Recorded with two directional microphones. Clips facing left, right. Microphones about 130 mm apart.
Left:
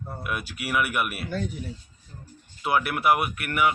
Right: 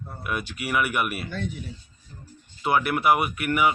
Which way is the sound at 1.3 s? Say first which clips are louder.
Left 2 dB; 40° left (ahead or behind).